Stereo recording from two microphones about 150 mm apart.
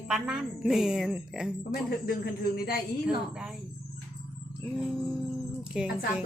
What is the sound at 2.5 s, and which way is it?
Speech, 90° left.